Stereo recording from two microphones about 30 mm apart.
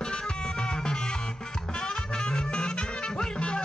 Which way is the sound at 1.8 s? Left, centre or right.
Left.